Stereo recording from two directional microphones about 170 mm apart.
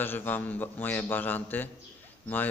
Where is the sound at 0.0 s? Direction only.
10° left (ahead or behind).